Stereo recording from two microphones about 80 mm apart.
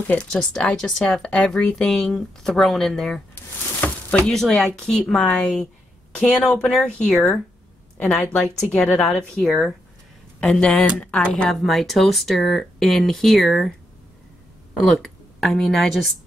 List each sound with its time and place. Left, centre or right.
0.2 s a woman's voice: centre
8.5 s speech: centre
9.4 s speech: centre
11.6 s speech: centre